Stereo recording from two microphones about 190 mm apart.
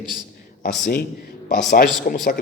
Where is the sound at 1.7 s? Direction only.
50° left (ahead or behind).